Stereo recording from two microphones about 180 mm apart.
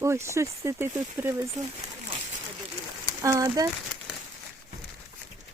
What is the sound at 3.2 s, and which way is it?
Speech, 20° right (ahead or behind).